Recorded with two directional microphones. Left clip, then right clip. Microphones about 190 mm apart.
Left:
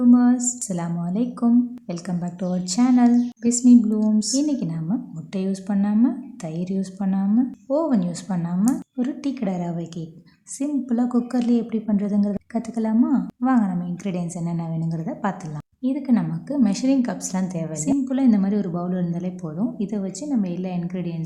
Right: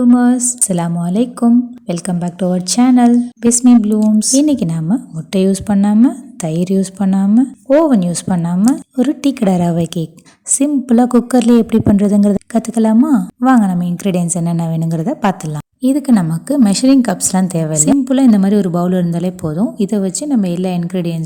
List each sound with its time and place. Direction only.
0.0 s a woman's voice: 30° right (ahead or behind)